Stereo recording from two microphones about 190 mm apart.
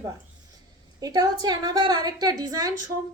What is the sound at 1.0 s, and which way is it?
A woman's voice, 20° right (ahead or behind).